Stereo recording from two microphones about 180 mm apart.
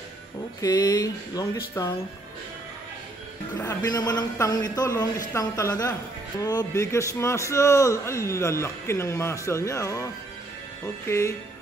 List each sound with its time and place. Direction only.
0.6 s speech: 20° left (ahead or behind)
3.6 s a man's voice: 20° left (ahead or behind)
11.1 s a man's voice: 15° left (ahead or behind)